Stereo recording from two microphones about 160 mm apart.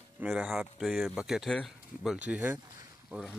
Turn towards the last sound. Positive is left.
turn(degrees=-5)  # may be behind; listen again after turning